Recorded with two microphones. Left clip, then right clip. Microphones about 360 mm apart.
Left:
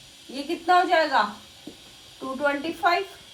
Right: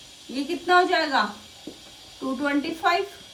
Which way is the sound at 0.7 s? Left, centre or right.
Centre.